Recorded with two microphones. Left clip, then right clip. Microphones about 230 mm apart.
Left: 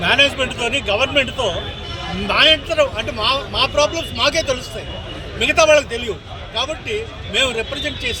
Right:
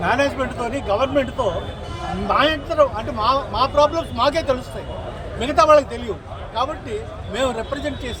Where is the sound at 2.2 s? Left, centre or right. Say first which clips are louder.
Left 3 dB; left.